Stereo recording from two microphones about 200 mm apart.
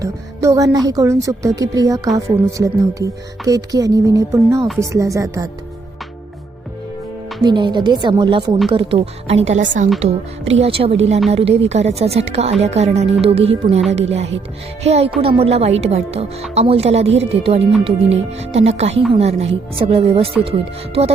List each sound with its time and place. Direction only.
0.0 s speech: 15° right (ahead or behind)
7.4 s speech: 20° right (ahead or behind)